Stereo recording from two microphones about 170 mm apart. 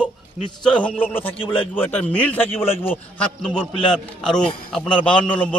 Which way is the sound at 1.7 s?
10° left (ahead or behind).